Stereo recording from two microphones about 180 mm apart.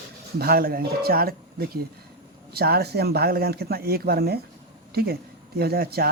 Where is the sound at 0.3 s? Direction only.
55° right (ahead or behind).